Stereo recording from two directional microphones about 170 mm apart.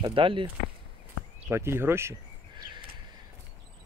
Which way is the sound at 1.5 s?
15° right (ahead or behind).